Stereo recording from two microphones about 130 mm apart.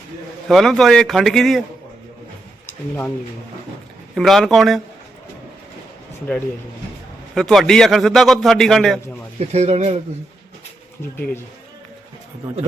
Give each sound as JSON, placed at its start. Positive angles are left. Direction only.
{"t": 0.4, "sound": "a man's voice", "side_deg": 0}
{"t": 2.6, "sound": "speech", "side_deg": 15}
{"t": 4.1, "sound": "a man's voice", "side_deg": 0}
{"t": 6.3, "sound": "speech", "side_deg": 10}
{"t": 7.3, "sound": "a man's voice", "side_deg": 0}
{"t": 9.5, "sound": "speech", "side_deg": -55}